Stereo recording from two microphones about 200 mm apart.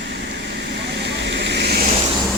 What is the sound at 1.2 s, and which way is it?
Vehicle, 55° right (ahead or behind).